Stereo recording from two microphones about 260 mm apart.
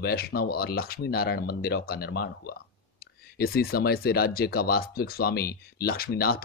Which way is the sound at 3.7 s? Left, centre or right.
Left.